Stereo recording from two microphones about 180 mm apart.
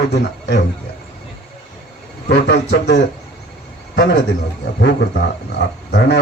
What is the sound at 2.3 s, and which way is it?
A man's voice, 70° left (ahead or behind).